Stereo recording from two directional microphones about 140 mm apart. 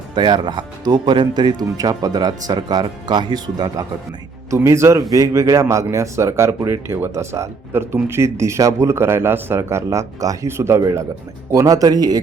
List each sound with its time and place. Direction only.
0.1 s a man's voice: 30° right (ahead or behind)